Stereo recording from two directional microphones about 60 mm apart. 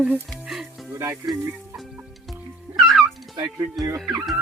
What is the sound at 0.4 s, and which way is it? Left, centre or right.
Music, centre.